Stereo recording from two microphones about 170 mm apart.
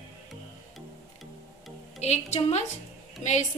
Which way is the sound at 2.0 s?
40° left (ahead or behind).